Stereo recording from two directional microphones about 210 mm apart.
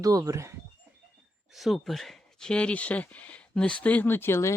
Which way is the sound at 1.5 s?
Centre (ahead or behind).